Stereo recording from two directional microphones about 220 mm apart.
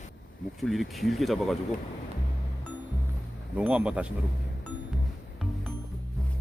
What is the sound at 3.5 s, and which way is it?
Speech, 5° right (ahead or behind).